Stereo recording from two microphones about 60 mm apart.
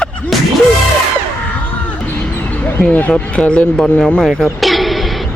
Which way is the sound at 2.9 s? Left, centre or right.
Left.